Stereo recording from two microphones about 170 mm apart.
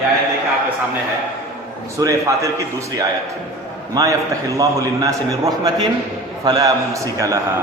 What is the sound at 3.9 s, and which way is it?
A man's voice, 20° right (ahead or behind).